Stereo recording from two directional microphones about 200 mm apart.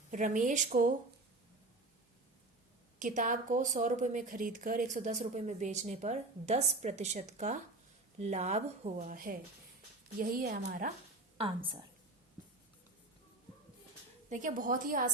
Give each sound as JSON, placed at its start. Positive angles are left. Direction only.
{"t": 0.1, "sound": "a woman's voice", "side_deg": -40}
{"t": 3.0, "sound": "a woman's voice", "side_deg": -40}
{"t": 11.3, "sound": "a woman's voice", "side_deg": -25}
{"t": 14.3, "sound": "a woman's voice", "side_deg": -40}